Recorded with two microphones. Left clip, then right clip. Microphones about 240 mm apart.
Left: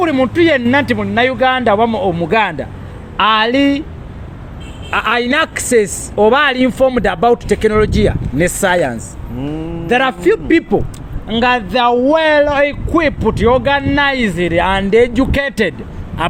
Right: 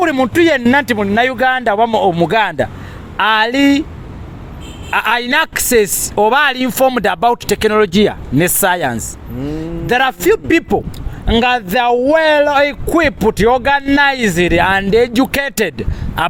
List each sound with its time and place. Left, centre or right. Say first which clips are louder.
0.0 s speech: even; right
4.9 s speech: even; right